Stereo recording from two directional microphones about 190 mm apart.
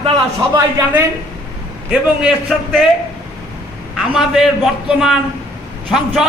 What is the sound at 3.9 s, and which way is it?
A man's voice, centre (ahead or behind).